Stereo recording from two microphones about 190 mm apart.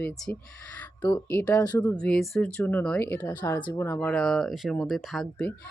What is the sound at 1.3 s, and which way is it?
Speech, 10° left (ahead or behind).